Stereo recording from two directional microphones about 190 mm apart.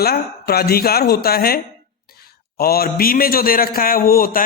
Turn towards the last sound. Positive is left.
turn(degrees=50)  # may be behind; listen again after turning